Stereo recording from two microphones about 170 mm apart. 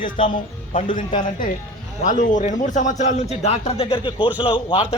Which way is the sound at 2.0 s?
50° left (ahead or behind).